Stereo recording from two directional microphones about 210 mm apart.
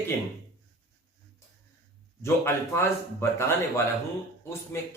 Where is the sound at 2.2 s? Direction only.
10° left (ahead or behind).